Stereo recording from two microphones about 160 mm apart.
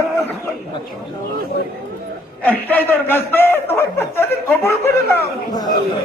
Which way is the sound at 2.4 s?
10° left (ahead or behind).